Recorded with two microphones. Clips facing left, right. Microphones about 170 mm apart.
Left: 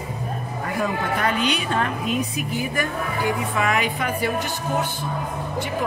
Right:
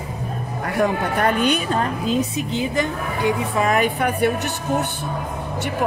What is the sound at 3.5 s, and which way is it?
Speech, 35° right (ahead or behind).